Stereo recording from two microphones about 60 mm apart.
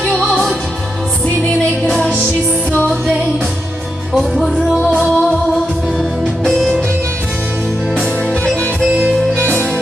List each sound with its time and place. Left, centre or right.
0.1 s music: centre
1.9 s music: centre
4.4 s music: centre
9.4 s music: left